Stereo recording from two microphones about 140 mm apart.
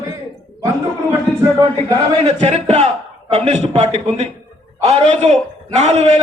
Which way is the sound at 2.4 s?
50° right (ahead or behind).